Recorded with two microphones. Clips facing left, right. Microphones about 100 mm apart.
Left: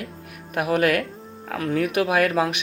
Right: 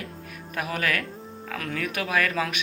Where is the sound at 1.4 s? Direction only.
35° left (ahead or behind).